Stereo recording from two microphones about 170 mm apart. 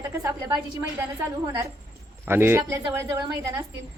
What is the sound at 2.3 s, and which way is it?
A woman's voice, 15° right (ahead or behind).